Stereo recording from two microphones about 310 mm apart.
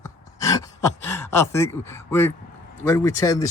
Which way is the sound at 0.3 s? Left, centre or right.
Centre.